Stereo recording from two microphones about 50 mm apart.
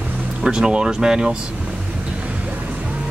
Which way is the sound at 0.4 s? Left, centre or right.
Centre.